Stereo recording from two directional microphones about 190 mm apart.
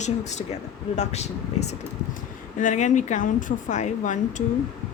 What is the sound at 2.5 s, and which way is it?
A woman's voice, 40° left (ahead or behind).